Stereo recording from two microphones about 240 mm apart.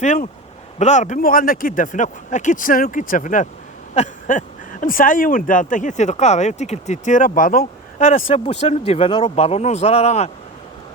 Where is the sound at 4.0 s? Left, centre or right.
Left.